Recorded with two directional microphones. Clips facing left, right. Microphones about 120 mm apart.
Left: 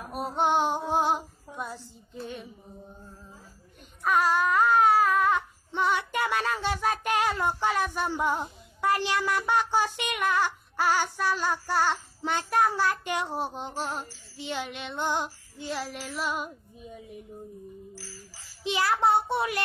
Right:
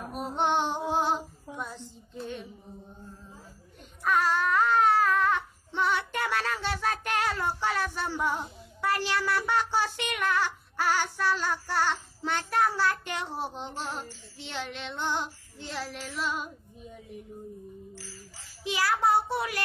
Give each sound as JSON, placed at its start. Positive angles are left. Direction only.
{"t": 0.1, "sound": "female singing", "side_deg": 10}
{"t": 4.0, "sound": "baby cry", "side_deg": 15}
{"t": 14.4, "sound": "child singing", "side_deg": 15}
{"t": 18.6, "sound": "child singing", "side_deg": 25}
{"t": 19.2, "sound": "speech", "side_deg": 25}